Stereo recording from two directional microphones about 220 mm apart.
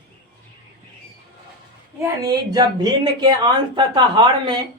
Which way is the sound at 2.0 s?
15° right (ahead or behind).